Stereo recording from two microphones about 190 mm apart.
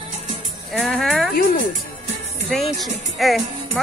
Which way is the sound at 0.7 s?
Centre (ahead or behind).